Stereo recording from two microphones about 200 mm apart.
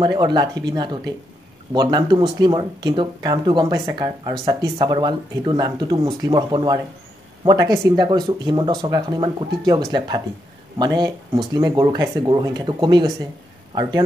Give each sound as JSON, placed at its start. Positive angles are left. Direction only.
{"t": 0.0, "sound": "speech", "side_deg": -20}